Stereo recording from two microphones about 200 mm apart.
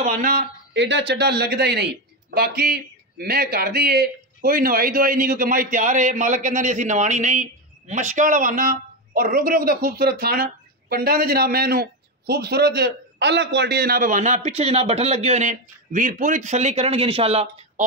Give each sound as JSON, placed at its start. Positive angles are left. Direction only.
{"t": 0.0, "sound": "speech", "side_deg": -45}
{"t": 0.7, "sound": "speech", "side_deg": -60}